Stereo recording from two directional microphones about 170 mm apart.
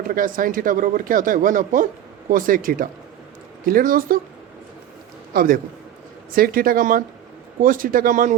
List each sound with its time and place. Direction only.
0.1 s speech: 55° right (ahead or behind)
5.3 s a man's voice: 60° right (ahead or behind)